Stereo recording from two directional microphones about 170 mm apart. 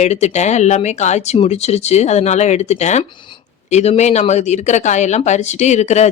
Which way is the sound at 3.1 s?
30° left (ahead or behind).